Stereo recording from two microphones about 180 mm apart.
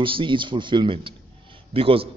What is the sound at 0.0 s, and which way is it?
A man's voice, 30° right (ahead or behind).